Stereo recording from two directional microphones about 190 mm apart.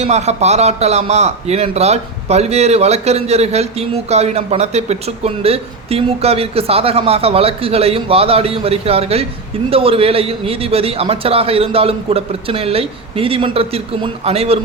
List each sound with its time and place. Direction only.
0.0 s a man's voice: 35° right (ahead or behind)